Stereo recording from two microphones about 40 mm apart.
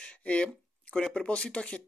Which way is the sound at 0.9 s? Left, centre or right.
Centre.